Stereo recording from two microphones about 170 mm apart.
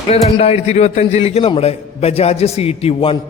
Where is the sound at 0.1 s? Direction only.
35° left (ahead or behind).